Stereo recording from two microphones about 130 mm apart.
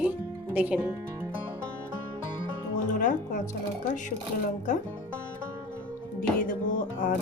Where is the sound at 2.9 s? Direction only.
75° left (ahead or behind).